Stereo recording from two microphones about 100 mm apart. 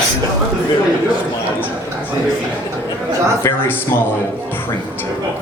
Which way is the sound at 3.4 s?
20° left (ahead or behind).